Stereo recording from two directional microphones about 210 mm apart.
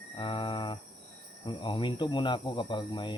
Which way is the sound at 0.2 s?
25° left (ahead or behind).